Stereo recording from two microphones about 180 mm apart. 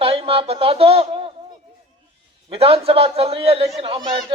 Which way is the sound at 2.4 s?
35° right (ahead or behind).